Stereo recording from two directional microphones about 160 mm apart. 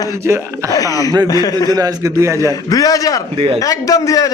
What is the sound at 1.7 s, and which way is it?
Speech, 20° right (ahead or behind).